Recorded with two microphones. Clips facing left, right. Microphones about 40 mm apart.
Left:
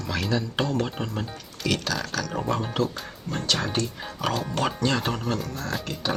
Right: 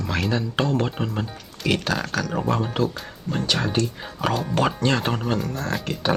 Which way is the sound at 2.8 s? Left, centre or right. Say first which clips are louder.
Right 4 dB; right.